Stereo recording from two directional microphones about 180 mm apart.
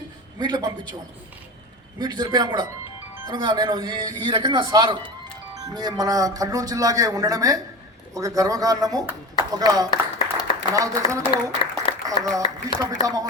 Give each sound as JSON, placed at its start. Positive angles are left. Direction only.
{"t": 0.3, "sound": "speech", "side_deg": -25}
{"t": 2.0, "sound": "a man's voice", "side_deg": -25}
{"t": 9.9, "sound": "a sound", "side_deg": 25}
{"t": 11.2, "sound": "applause", "side_deg": 30}
{"t": 12.0, "sound": "speech", "side_deg": -20}